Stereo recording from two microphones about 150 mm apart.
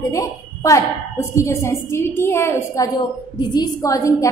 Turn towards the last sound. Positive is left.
turn(degrees=20)  # may be behind; listen again after turning